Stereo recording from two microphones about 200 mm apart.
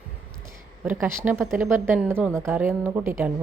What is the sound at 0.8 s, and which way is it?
A woman's voice, 10° right (ahead or behind).